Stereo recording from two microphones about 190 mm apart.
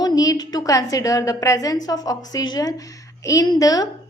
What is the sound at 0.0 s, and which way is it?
A woman's voice, 20° left (ahead or behind).